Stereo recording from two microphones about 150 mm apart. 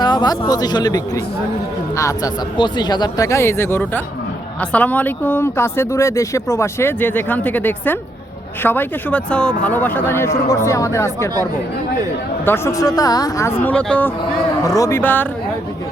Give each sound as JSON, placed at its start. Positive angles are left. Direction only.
{"t": 0.0, "sound": "speech", "side_deg": 30}
{"t": 12.5, "sound": "speech", "side_deg": 20}
{"t": 14.6, "sound": "speech", "side_deg": 20}